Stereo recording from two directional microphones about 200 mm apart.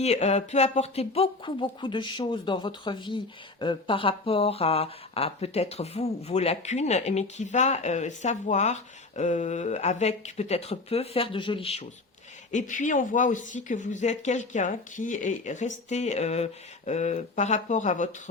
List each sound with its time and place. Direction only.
0.0 s speech: 35° left (ahead or behind)